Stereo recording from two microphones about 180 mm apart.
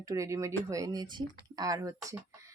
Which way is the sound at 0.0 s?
20° right (ahead or behind).